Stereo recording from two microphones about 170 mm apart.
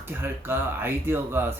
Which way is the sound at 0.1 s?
15° right (ahead or behind).